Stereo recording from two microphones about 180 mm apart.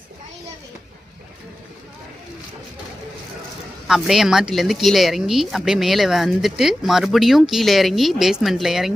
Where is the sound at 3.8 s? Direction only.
Centre (ahead or behind).